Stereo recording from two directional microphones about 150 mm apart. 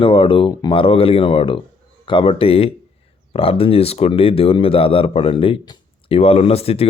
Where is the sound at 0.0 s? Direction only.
35° left (ahead or behind).